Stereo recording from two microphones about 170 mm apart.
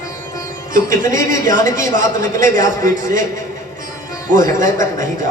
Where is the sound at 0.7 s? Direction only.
50° right (ahead or behind).